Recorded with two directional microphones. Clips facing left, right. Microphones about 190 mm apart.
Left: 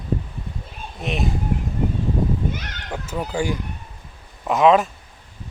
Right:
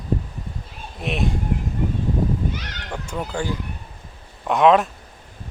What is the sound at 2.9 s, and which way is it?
Speech, 5° left (ahead or behind).